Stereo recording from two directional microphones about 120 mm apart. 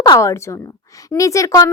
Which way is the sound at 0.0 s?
30° left (ahead or behind).